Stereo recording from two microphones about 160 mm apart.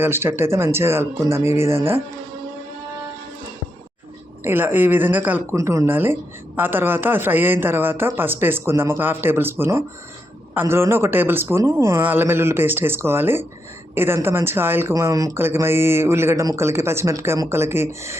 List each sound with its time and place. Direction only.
0.0 s speech: 15° right (ahead or behind)
4.4 s speech: 15° right (ahead or behind)